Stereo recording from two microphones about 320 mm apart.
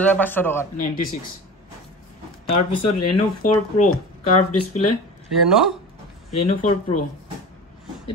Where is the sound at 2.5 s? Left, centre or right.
Left.